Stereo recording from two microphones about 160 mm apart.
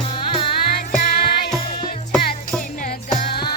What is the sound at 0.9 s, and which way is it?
Music, 50° left (ahead or behind).